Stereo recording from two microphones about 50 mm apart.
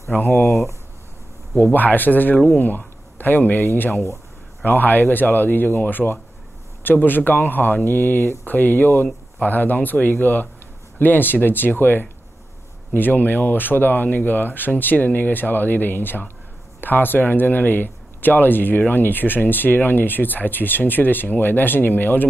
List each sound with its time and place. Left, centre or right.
0.3 s speech: centre
1.6 s speech: left
4.6 s speech: left